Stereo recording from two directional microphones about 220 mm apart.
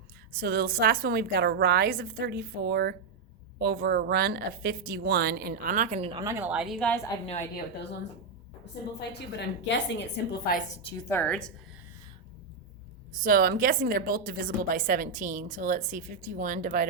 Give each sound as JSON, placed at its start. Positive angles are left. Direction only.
{"t": 0.3, "sound": "a woman's voice", "side_deg": -45}
{"t": 6.1, "sound": "a woman's voice", "side_deg": -10}
{"t": 7.3, "sound": "a woman's voice", "side_deg": 30}
{"t": 9.0, "sound": "a woman's voice", "side_deg": 50}
{"t": 11.1, "sound": "a woman's voice", "side_deg": 5}
{"t": 13.2, "sound": "a woman's voice", "side_deg": -40}